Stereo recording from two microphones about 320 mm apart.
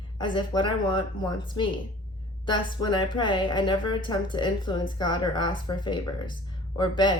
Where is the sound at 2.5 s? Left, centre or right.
Centre.